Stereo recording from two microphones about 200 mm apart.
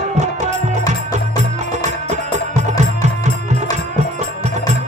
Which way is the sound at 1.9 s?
35° right (ahead or behind).